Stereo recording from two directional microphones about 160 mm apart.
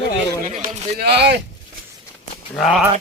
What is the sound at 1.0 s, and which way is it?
Speech, 90° right.